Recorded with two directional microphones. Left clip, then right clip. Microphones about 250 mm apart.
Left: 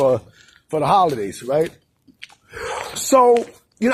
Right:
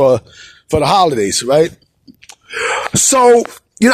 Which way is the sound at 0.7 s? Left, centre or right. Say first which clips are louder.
Right 5 dB; right.